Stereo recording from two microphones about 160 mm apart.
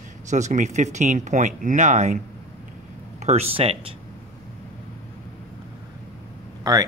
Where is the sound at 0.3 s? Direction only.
50° right (ahead or behind).